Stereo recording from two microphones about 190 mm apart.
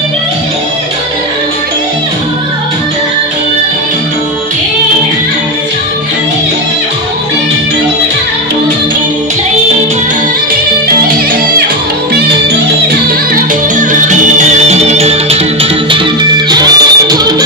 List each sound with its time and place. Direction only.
13.3 s music: 40° right (ahead or behind)
16.4 s music: 20° right (ahead or behind)